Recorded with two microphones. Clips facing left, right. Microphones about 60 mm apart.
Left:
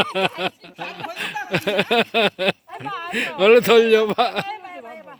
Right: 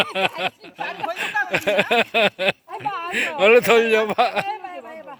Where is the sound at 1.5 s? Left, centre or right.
Centre.